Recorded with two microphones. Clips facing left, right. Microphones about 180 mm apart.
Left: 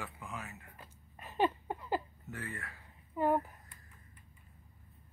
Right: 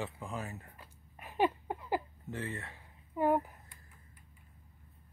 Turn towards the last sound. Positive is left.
turn(degrees=-15)  # may be behind; listen again after turning